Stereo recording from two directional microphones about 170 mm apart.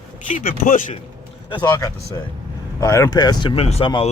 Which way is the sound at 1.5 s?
25° left (ahead or behind).